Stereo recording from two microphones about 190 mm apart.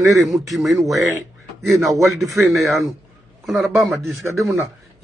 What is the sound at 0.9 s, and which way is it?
Speech, 15° right (ahead or behind).